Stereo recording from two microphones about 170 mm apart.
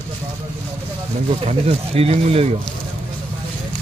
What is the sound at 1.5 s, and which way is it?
Speech, 35° right (ahead or behind).